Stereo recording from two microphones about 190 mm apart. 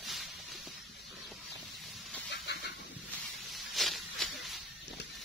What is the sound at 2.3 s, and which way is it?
Vehicle, 60° left (ahead or behind).